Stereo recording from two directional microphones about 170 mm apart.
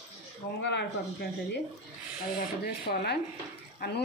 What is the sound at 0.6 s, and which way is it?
Speech, 90° left.